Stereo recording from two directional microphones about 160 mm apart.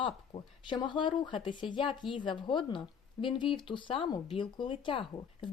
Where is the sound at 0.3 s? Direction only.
45° left (ahead or behind).